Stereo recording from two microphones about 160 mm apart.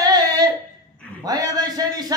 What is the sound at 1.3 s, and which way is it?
Speech, 25° right (ahead or behind).